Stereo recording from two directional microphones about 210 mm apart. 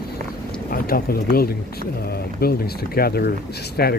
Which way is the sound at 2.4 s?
45° left (ahead or behind).